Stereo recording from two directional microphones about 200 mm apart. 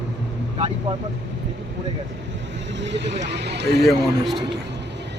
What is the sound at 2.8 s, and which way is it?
Speech, 60° right (ahead or behind).